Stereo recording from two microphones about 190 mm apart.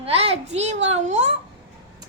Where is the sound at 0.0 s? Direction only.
30° right (ahead or behind).